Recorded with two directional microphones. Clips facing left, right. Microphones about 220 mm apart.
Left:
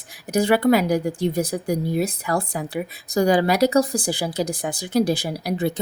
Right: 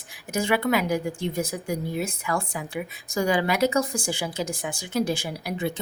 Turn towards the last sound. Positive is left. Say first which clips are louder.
# left 5 dB
turn(degrees=40)  # may be behind; listen again after turning